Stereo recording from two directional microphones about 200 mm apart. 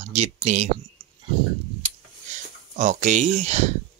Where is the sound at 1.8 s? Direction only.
35° right (ahead or behind).